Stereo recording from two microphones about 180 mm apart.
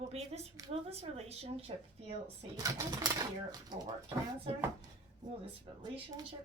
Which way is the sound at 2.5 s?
20° right (ahead or behind).